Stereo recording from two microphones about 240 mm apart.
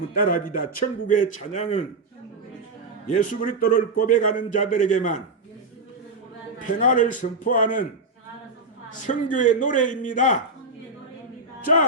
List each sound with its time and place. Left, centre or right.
0.2 s a man's voice: left
3.1 s a man's voice: left
6.6 s a man's voice: left
9.0 s a man's voice: left
11.6 s speech: left